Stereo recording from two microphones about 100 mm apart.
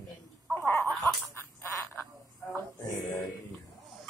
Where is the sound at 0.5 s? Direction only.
20° left (ahead or behind).